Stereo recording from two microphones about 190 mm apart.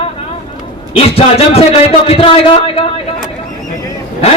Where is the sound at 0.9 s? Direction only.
30° left (ahead or behind).